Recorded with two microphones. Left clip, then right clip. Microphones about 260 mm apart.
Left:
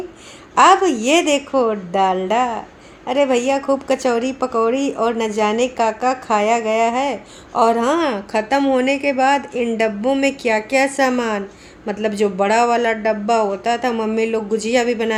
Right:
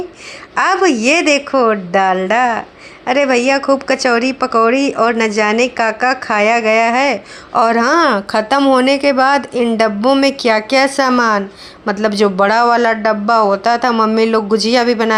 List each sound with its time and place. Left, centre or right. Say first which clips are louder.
0.6 s speech: even; centre